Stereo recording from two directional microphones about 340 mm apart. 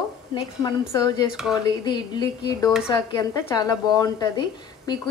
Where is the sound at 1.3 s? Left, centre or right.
Centre.